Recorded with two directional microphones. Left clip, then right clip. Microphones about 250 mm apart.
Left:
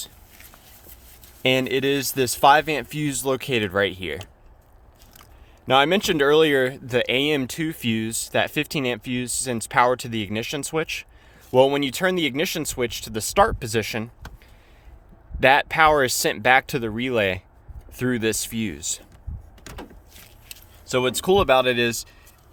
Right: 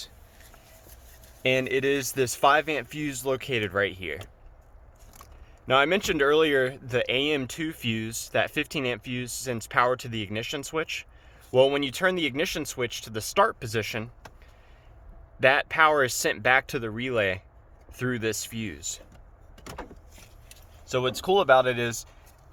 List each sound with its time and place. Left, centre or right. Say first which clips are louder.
1.4 s speech: left 4 dB; left
5.6 s speech: left 4 dB; left
15.4 s speech: left 4 dB; left
20.5 s speech: left 5 dB; left